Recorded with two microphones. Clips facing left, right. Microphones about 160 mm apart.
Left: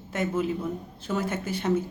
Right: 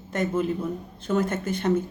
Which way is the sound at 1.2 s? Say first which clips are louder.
Right 3 dB; 50° right (ahead or behind).